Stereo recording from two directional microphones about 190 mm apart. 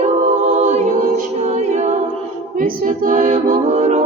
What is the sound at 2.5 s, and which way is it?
A capella, 45° right (ahead or behind).